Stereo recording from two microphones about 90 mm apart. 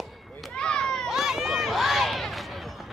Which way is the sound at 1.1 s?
5° right (ahead or behind).